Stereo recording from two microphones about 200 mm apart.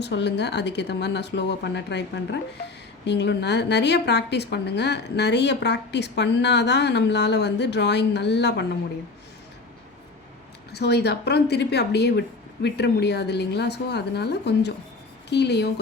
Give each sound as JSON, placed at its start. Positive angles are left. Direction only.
{"t": 0.0, "sound": "a woman's voice", "side_deg": 60}
{"t": 10.7, "sound": "a woman's voice", "side_deg": 55}